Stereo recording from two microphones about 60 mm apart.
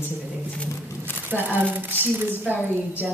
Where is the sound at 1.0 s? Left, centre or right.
Right.